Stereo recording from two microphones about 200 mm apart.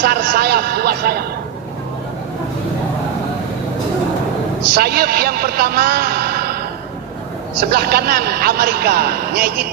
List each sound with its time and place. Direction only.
0.0 s a man's voice: 55° right (ahead or behind)
4.7 s a man's voice: 50° right (ahead or behind)
7.7 s a man's voice: 55° right (ahead or behind)